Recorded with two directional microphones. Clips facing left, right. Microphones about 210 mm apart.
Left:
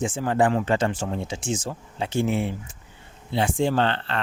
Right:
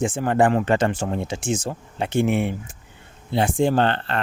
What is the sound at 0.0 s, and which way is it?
Speech, 60° right (ahead or behind).